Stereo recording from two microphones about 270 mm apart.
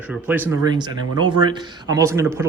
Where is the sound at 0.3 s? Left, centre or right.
Centre.